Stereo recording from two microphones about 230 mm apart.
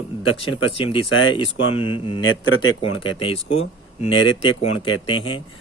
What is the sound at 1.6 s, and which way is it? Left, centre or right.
Speech, left.